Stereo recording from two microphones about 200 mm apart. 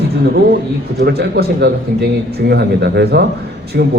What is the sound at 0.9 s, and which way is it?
A man's voice, 55° right (ahead or behind).